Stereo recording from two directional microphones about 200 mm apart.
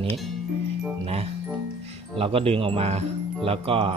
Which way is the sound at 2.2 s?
30° right (ahead or behind).